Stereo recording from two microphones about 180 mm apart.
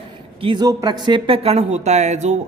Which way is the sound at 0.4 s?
25° right (ahead or behind).